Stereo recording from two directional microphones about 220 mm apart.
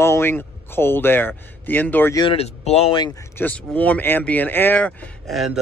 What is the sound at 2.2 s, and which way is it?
Speech, 30° left (ahead or behind).